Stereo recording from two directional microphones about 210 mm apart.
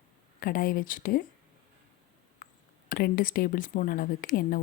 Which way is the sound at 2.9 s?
45° left (ahead or behind).